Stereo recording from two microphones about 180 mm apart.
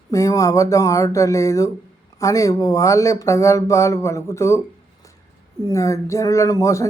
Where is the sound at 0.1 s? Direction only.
15° left (ahead or behind).